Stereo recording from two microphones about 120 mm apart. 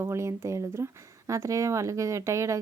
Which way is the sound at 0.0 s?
25° right (ahead or behind).